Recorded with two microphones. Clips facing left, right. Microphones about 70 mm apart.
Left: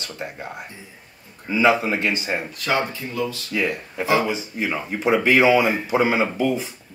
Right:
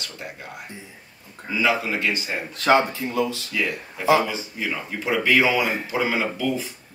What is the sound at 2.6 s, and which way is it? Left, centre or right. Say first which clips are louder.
Speech: right 8 dB; right.